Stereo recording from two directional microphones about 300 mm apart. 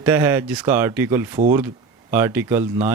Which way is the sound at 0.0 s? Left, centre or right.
Centre.